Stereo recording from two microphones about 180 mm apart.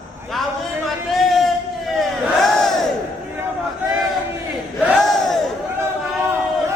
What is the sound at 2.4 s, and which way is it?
Battle cry, centre (ahead or behind).